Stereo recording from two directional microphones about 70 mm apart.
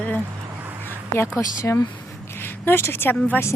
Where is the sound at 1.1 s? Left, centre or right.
Left.